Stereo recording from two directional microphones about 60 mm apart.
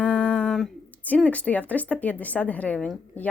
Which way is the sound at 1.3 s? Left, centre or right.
Left.